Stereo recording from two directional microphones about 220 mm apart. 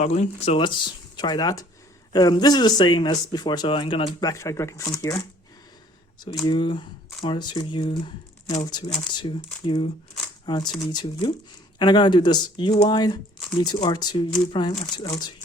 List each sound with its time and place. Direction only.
0.0 s speech: 30° left (ahead or behind); by 5.2 s 15° left (ahead or behind)
6.4 s speech: 20° left (ahead or behind)